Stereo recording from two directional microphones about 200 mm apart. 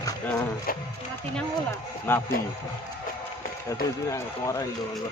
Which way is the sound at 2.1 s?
10° left (ahead or behind).